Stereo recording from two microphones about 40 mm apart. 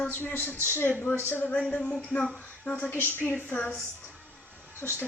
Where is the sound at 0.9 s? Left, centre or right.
Left.